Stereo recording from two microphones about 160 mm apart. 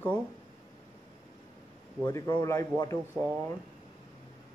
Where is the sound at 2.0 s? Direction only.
25° left (ahead or behind).